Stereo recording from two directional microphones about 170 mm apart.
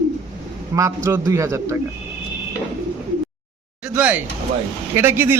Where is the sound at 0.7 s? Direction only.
20° right (ahead or behind).